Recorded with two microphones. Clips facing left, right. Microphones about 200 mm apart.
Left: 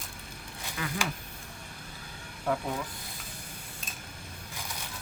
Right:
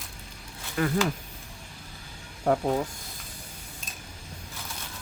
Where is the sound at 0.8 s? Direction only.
50° right (ahead or behind).